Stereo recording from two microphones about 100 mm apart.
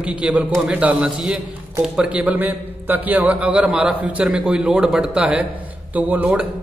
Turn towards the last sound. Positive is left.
turn(degrees=-15)  # may be behind; listen again after turning